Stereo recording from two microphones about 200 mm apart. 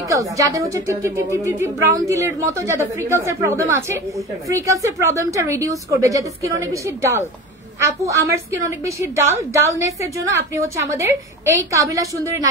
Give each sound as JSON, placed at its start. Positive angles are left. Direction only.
{"t": 0.0, "sound": "a woman's voice", "side_deg": -15}